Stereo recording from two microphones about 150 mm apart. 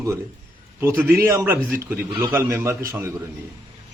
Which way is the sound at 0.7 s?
15° right (ahead or behind).